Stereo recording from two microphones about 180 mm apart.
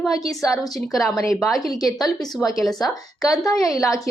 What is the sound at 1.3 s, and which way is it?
A woman's voice, centre (ahead or behind).